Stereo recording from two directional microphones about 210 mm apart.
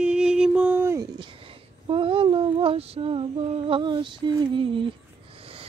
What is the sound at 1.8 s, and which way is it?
Female singing, 25° right (ahead or behind).